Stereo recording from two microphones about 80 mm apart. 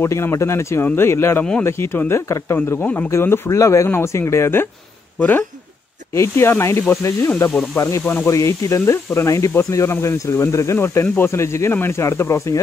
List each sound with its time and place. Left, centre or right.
0.0 s speech: left
3.1 s speech: left
6.1 s speech: left
7.7 s speech: left
8.0 s speech: centre
8.3 s speech: left